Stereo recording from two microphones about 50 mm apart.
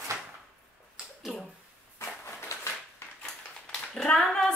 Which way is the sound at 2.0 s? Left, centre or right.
Left.